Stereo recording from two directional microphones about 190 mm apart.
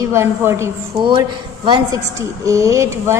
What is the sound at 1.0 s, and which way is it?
A woman's voice, 25° right (ahead or behind).